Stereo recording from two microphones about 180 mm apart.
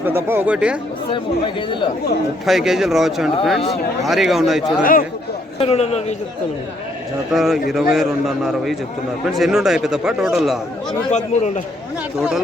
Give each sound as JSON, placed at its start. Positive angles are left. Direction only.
{"t": 0.0, "sound": "speech", "side_deg": -15}
{"t": 1.1, "sound": "speech", "side_deg": 25}
{"t": 2.5, "sound": "a man's voice", "side_deg": 0}
{"t": 4.8, "sound": "a man's voice", "side_deg": 50}
{"t": 5.5, "sound": "a man's voice", "side_deg": 35}
{"t": 7.3, "sound": "a man's voice", "side_deg": 0}
{"t": 9.2, "sound": "a man's voice", "side_deg": 0}
{"t": 11.1, "sound": "a man's voice", "side_deg": 40}